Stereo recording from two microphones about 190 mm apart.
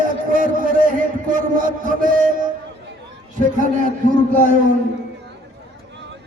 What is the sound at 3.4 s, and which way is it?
Speech, 45° right (ahead or behind).